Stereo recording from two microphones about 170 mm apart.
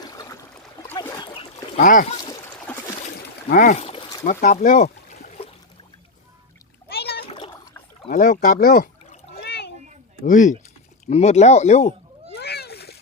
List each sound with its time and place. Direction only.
0.0 s trickle: 20° left (ahead or behind)
1.7 s speech: 50° left (ahead or behind)
2.1 s a sound: 25° left (ahead or behind)
2.7 s a sound: 10° left (ahead or behind)
3.5 s a sound: 50° left (ahead or behind); by 4.2 s 35° left (ahead or behind)
4.2 s speech: 50° left (ahead or behind)
6.9 s splash: 70° left (ahead or behind)
7.3 s splash: 30° left (ahead or behind)
8.1 s speech: 50° left (ahead or behind)
9.4 s a sound: 80° left
10.2 s speech: 45° left (ahead or behind)
12.4 s splash: 70° left (ahead or behind)